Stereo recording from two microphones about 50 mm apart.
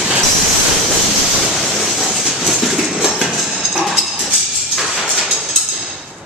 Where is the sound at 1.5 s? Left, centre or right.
Centre.